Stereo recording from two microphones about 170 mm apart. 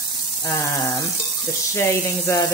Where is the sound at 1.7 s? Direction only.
15° left (ahead or behind).